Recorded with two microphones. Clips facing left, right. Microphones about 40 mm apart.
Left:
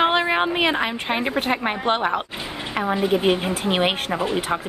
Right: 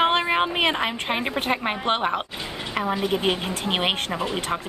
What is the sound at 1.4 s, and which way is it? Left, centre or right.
A woman's voice, centre.